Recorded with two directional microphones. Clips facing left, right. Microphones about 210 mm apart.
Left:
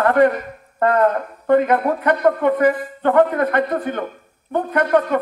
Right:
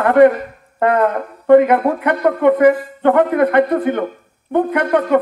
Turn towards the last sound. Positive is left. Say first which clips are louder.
# right 2 dB
turn(degrees=-20)  # may be behind; listen again after turning